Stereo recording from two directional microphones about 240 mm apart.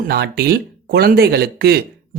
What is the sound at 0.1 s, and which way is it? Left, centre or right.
Speech, right.